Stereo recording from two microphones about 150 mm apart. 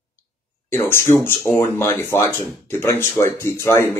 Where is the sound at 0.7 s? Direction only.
15° left (ahead or behind).